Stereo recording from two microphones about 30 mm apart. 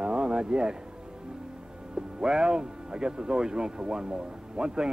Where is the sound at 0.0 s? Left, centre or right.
Right.